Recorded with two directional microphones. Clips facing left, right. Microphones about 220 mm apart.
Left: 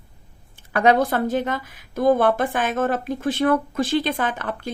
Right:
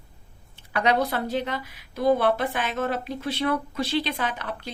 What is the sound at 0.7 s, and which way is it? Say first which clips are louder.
Speech: left 5 dB; 50° left (ahead or behind).